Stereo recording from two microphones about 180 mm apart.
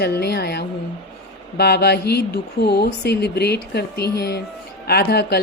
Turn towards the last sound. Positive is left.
turn(degrees=60)  # may be behind; listen again after turning